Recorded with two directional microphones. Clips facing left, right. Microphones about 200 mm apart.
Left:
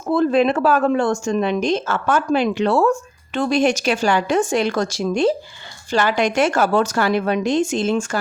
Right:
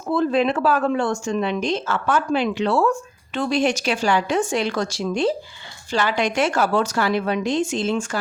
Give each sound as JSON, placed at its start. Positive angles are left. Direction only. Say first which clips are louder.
{"t": 0.1, "sound": "speech", "louder": "left 3 dB", "side_deg": 45}